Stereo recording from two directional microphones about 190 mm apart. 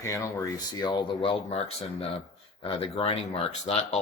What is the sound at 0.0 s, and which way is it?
Speech, 15° left (ahead or behind).